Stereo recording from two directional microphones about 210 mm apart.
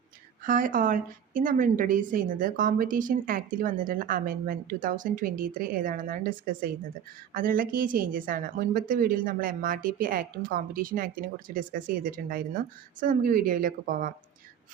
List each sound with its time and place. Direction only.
0.4 s a woman's voice: 40° right (ahead or behind)